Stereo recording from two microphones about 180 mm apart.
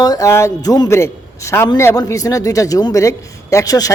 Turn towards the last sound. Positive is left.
turn(degrees=20)  # may be behind; listen again after turning